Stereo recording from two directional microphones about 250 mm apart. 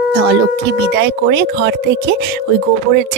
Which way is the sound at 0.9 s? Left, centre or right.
Right.